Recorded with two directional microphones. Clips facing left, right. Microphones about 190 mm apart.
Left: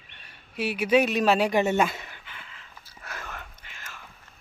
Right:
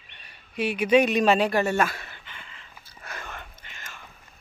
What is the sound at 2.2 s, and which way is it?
Whispering, 5° left (ahead or behind).